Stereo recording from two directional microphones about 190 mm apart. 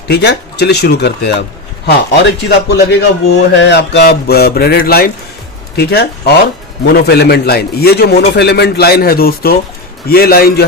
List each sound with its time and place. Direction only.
0.1 s a man's voice: 60° left (ahead or behind)